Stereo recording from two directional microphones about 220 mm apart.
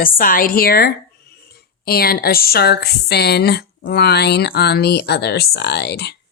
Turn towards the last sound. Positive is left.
turn(degrees=50)  # may be behind; listen again after turning